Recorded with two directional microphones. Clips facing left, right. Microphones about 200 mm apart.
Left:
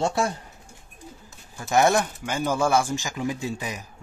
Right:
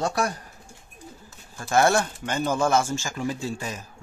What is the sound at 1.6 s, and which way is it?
Speech, 15° left (ahead or behind).